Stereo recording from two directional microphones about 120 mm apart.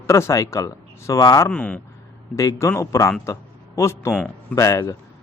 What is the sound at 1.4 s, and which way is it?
Speech, 10° left (ahead or behind).